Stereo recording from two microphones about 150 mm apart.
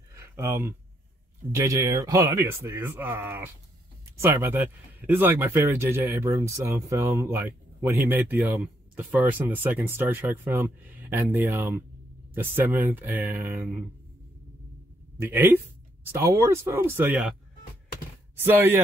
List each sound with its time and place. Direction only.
0.1 s a sound: 20° right (ahead or behind)
1.5 s speech: 20° right (ahead or behind)
15.1 s speech: 15° right (ahead or behind)
18.4 s speech: 15° right (ahead or behind)